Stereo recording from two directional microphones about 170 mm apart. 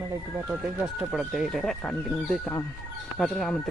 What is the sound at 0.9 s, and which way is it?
Speech, centre (ahead or behind).